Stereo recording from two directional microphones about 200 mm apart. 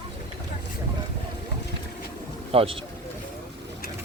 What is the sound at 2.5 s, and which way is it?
Speech, 30° right (ahead or behind).